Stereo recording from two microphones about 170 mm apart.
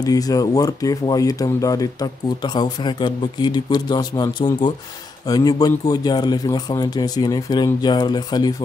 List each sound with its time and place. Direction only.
0.0 s speech: 20° left (ahead or behind)